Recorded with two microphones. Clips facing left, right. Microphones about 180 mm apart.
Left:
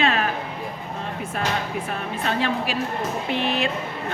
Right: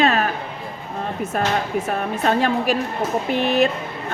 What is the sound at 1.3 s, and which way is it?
A woman's voice, 45° right (ahead or behind).